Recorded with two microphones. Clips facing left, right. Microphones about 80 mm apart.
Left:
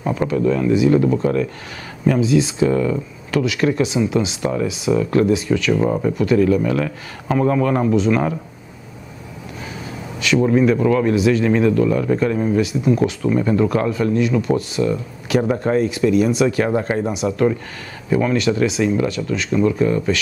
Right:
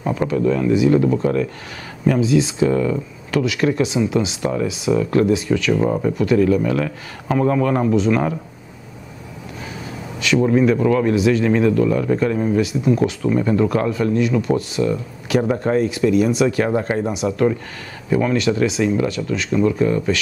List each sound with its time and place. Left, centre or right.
0.2 s speech: left
10.2 s speech: left